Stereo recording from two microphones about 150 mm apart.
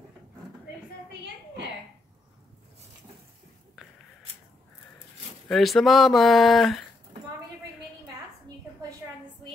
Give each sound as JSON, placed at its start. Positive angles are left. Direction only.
{"t": 5.5, "sound": "speech", "side_deg": 0}